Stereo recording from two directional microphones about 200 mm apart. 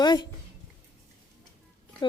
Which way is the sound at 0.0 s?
20° left (ahead or behind).